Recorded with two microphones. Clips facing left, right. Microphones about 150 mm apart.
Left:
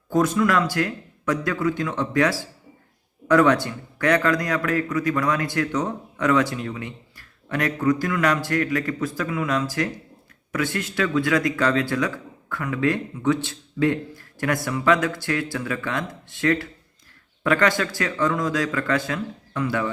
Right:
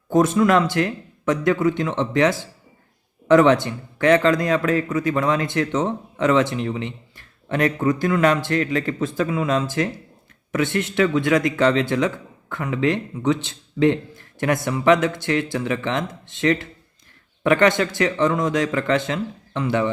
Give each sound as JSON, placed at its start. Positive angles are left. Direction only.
{"t": 0.1, "sound": "a man's voice", "side_deg": -25}